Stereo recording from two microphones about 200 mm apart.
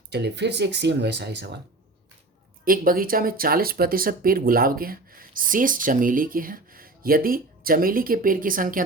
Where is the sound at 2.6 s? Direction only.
45° right (ahead or behind).